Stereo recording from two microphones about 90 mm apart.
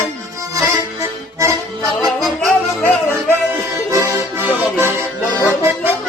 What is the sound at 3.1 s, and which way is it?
Music, 25° right (ahead or behind).